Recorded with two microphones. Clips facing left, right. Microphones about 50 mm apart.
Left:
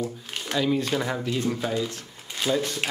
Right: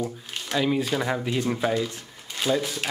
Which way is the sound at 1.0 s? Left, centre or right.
Centre.